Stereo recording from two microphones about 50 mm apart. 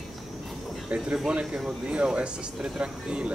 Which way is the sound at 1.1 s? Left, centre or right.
Centre.